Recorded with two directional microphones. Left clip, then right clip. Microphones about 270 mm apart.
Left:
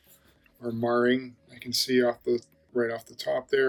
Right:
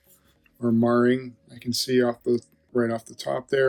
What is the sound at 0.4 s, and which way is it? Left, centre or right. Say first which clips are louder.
Speech: right 6 dB; centre.